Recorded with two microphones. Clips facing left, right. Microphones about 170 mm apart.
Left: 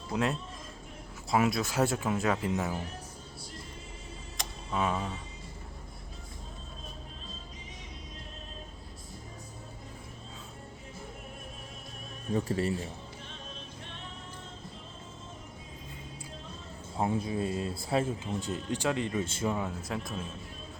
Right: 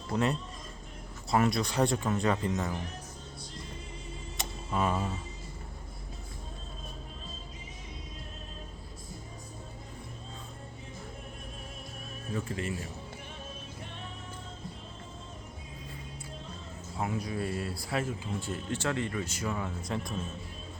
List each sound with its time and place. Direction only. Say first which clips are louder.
0.1 s speech: right 1 dB; centre (ahead or behind)
4.4 s a sound: right 1 dB; centre (ahead or behind)
12.3 s speech: left 5 dB; 35° left (ahead or behind)
17.0 s speech: left 3 dB; 25° left (ahead or behind)
19.5 s speech: left 1 dB; 5° left (ahead or behind)